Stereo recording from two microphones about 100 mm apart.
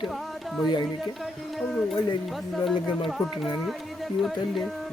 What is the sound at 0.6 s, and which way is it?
Speech, 50° left (ahead or behind).